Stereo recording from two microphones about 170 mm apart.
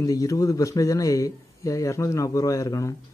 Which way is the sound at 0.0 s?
20° left (ahead or behind).